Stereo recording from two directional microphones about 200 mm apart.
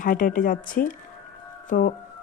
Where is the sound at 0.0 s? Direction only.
45° left (ahead or behind).